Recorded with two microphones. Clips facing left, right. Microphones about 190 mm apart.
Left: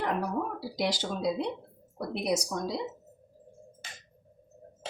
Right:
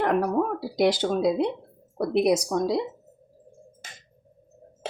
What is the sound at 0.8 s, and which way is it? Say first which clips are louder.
Speech: right 9 dB; 55° right (ahead or behind).